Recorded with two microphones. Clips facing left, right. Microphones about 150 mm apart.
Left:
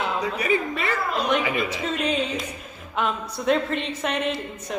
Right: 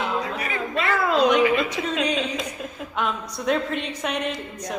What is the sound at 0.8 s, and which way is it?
Speech, 90° right.